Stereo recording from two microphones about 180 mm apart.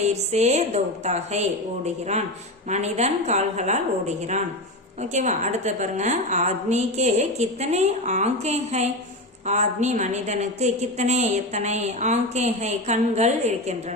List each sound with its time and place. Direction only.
0.1 s a woman's voice: 40° right (ahead or behind)